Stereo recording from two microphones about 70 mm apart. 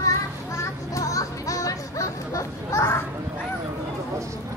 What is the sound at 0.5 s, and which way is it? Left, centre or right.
Music, left.